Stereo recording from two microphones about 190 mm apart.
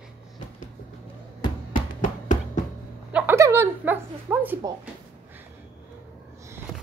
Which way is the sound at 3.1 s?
10° right (ahead or behind).